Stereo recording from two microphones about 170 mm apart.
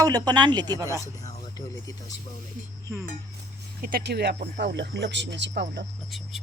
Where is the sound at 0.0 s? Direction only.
20° right (ahead or behind).